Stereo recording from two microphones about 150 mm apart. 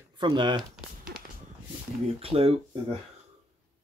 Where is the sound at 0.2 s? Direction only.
30° right (ahead or behind).